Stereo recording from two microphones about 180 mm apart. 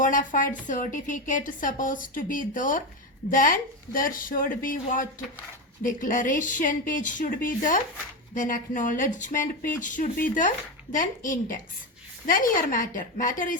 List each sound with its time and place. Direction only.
0.0 s a woman's voice: 45° left (ahead or behind)